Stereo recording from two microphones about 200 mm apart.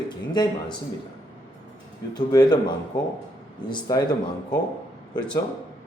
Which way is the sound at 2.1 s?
20° left (ahead or behind).